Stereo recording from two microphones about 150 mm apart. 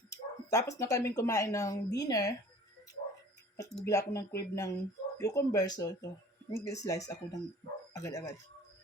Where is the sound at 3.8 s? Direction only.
20° left (ahead or behind).